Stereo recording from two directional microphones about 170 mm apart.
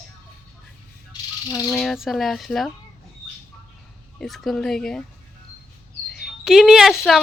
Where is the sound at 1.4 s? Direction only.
20° left (ahead or behind).